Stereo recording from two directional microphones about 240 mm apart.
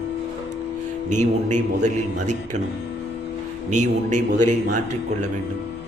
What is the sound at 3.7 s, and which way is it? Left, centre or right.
A man's voice, right.